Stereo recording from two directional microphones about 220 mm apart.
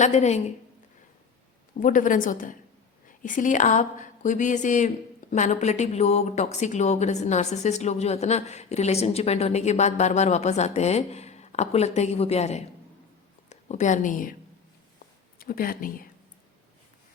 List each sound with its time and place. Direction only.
0.0 s a woman's voice: 30° left (ahead or behind)
1.8 s a woman's voice: 35° left (ahead or behind)
15.4 s a woman's voice: 40° left (ahead or behind)